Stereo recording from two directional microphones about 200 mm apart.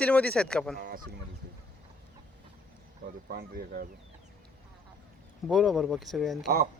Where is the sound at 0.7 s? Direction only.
50° right (ahead or behind).